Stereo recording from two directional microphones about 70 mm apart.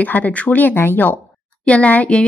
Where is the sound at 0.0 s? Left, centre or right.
Left.